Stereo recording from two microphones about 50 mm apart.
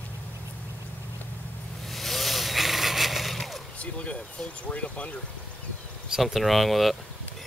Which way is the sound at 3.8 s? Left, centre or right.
Left.